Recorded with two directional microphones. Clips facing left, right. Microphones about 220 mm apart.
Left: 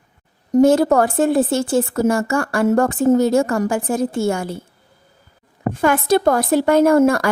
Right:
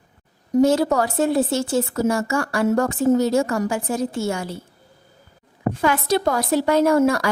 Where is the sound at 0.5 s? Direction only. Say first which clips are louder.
Left 4 dB; 50° left (ahead or behind).